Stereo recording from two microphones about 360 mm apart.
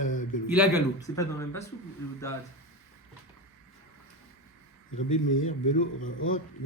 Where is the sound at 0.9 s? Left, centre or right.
Centre.